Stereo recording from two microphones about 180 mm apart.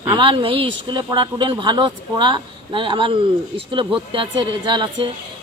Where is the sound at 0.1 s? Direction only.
30° right (ahead or behind).